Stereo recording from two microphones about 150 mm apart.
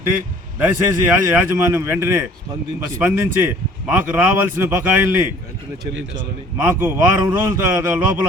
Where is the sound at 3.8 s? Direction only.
10° right (ahead or behind).